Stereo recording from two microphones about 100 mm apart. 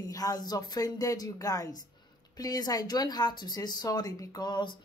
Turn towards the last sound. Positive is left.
turn(degrees=45)  # may be behind; listen again after turning